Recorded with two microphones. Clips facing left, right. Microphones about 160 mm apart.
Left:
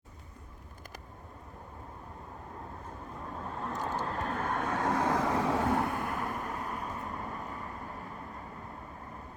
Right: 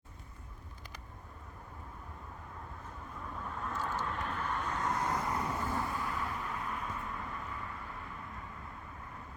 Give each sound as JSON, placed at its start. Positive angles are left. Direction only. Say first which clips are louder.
{"t": 3.6, "sound": "vehicle", "louder": "left 3 dB", "side_deg": 40}
{"t": 4.7, "sound": "vehicle", "louder": "left 6 dB", "side_deg": 90}